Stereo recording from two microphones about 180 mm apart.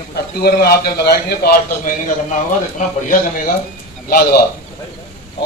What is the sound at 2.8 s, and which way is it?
Speech, 45° left (ahead or behind).